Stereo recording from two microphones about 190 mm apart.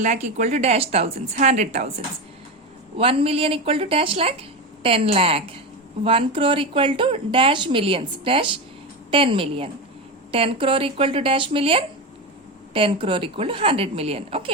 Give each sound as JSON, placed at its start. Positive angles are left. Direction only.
{"t": 0.0, "sound": "speech", "side_deg": -40}
{"t": 3.0, "sound": "speech", "side_deg": -30}